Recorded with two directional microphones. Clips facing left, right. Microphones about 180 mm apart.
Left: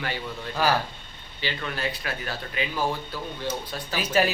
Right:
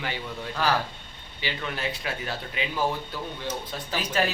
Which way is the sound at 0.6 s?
10° left (ahead or behind).